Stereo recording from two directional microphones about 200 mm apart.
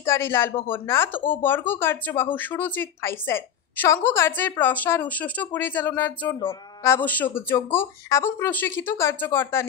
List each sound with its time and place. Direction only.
0.0 s a woman's voice: 10° left (ahead or behind)